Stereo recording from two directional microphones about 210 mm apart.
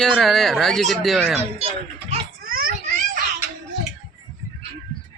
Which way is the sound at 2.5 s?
45° right (ahead or behind).